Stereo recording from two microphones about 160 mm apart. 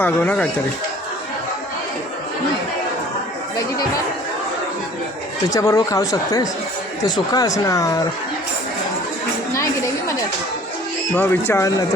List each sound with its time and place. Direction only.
0.0 s speech: 10° left (ahead or behind)
5.5 s speech: 20° left (ahead or behind)
11.1 s speech: 10° left (ahead or behind)